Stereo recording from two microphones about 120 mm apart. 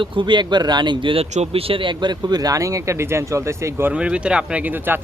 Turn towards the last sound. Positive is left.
turn(degrees=-15)  # may be behind; listen again after turning